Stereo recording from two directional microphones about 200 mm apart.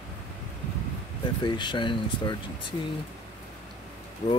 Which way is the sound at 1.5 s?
25° left (ahead or behind).